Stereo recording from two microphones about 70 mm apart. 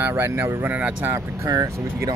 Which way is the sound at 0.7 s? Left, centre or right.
Right.